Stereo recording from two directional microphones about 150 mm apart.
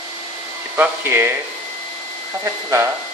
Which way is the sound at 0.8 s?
15° right (ahead or behind).